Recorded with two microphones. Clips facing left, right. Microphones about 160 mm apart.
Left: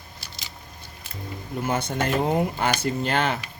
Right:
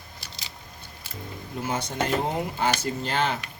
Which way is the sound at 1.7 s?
55° left (ahead or behind).